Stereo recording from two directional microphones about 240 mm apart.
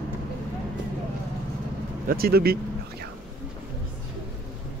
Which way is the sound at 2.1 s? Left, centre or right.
Right.